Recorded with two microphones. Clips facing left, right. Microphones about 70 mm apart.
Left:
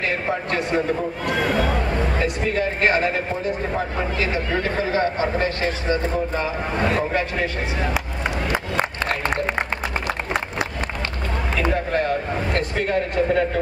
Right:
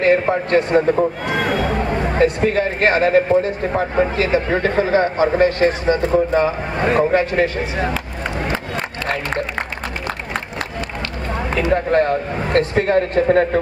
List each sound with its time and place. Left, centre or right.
0.0 s a man's voice: right
2.1 s a man's voice: right
11.9 s a man's voice: right